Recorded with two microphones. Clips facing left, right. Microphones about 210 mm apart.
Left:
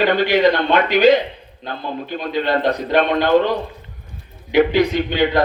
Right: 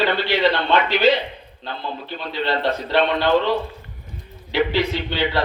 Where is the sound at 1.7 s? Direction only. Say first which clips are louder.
Left 4 dB; 45° left (ahead or behind).